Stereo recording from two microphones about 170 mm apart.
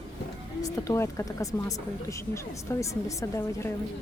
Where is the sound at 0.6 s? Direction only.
15° left (ahead or behind).